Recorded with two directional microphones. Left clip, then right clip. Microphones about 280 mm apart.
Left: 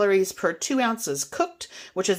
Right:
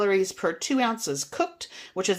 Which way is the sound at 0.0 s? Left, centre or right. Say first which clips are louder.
Left 2 dB; centre.